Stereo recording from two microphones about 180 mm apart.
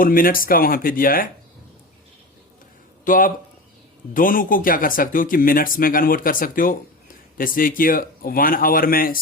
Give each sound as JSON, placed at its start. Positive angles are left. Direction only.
{"t": 0.0, "sound": "speech", "side_deg": 50}
{"t": 3.0, "sound": "speech", "side_deg": 50}